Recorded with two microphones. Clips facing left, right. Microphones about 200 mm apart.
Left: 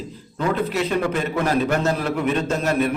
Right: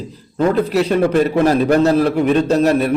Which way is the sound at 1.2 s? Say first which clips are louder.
Right 7 dB; 35° right (ahead or behind).